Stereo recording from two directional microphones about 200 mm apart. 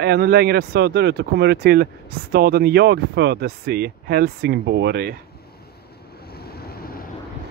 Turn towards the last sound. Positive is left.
turn(degrees=50)  # may be behind; listen again after turning